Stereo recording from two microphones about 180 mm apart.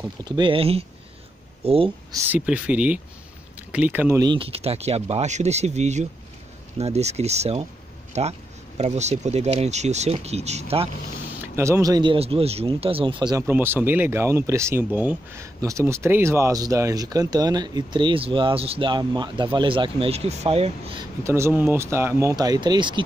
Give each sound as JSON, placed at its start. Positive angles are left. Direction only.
{"t": 0.2, "sound": "speech", "side_deg": -25}
{"t": 2.1, "sound": "speech", "side_deg": -10}
{"t": 4.2, "sound": "speech", "side_deg": -30}
{"t": 11.4, "sound": "speech", "side_deg": -15}
{"t": 13.5, "sound": "speech", "side_deg": -10}
{"t": 21.2, "sound": "speech", "side_deg": -15}